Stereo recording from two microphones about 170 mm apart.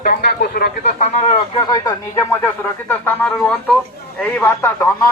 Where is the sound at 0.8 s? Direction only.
40° left (ahead or behind); by 4.7 s 10° left (ahead or behind).